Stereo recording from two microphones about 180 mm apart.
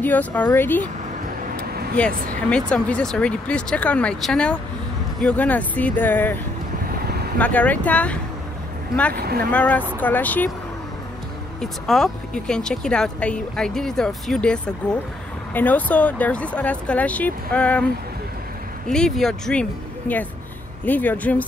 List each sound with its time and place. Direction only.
0.0 s speech: 10° left (ahead or behind)
2.0 s speech: 5° left (ahead or behind)
7.3 s speech: 10° left (ahead or behind)
9.1 s speech: 55° right (ahead or behind)
9.5 s speech: 5° left (ahead or behind)
11.6 s speech: centre (ahead or behind)
18.9 s speech: centre (ahead or behind)